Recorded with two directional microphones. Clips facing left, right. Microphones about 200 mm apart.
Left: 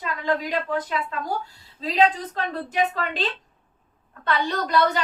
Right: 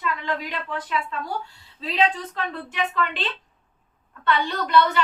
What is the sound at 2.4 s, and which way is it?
A woman's voice, 40° left (ahead or behind).